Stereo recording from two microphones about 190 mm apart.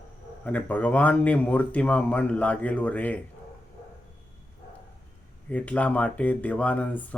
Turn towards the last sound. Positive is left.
turn(degrees=10)  # may be behind; listen again after turning